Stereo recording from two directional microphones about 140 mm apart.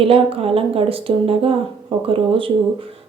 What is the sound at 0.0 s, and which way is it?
A woman's voice, 40° right (ahead or behind).